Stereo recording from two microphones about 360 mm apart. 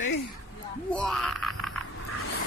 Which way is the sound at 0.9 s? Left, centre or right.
Centre.